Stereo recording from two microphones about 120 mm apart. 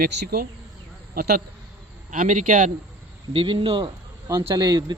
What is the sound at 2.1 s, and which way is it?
Speech, 90° right.